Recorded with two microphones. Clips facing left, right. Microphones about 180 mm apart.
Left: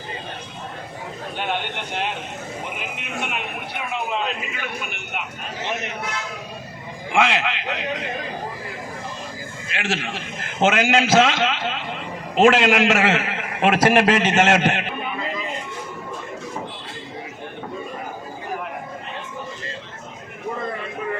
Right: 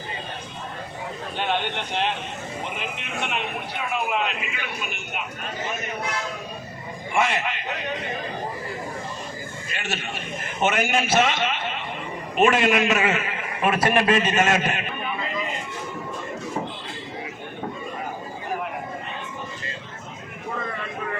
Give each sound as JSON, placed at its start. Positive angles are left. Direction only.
{"t": 2.7, "sound": "a man's voice", "side_deg": 5}
{"t": 3.9, "sound": "a man's voice", "side_deg": 30}
{"t": 4.5, "sound": "a man's voice", "side_deg": 55}
{"t": 5.6, "sound": "speech", "side_deg": 75}
{"t": 7.1, "sound": "a man's voice", "side_deg": 90}
{"t": 9.7, "sound": "a man's voice", "side_deg": 90}